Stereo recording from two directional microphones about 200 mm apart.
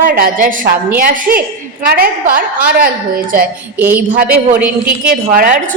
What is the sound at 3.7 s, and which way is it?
Speech, 10° right (ahead or behind).